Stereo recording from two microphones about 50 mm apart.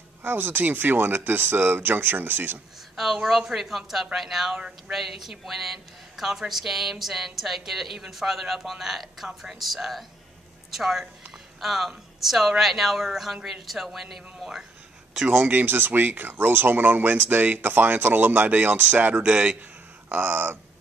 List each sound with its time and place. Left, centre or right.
0.2 s speech: right
3.3 s a woman's voice: centre
4.6 s speech: centre
4.9 s a woman's voice: centre
15.2 s speech: right
20.1 s speech: right